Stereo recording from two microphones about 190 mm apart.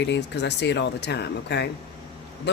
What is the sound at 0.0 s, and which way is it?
Speech, 65° left (ahead or behind).